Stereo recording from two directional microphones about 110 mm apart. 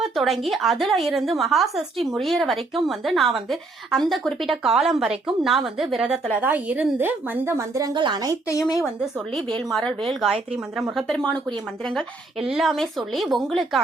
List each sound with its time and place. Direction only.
0.0 s a woman's voice: centre (ahead or behind)
6.4 s a woman's voice: 15° right (ahead or behind); by 7.9 s 30° right (ahead or behind)
7.9 s a woman's voice: 45° right (ahead or behind)
8.4 s speech: 35° left (ahead or behind)
8.8 s a woman's voice: centre (ahead or behind)
12.5 s a woman's voice: 5° right (ahead or behind)